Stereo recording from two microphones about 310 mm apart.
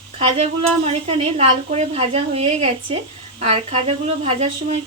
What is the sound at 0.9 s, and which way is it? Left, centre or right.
Speech, centre.